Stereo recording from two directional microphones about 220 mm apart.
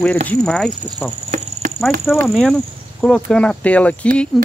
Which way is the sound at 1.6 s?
35° right (ahead or behind).